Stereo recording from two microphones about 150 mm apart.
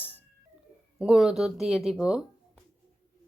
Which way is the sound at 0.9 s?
5° right (ahead or behind).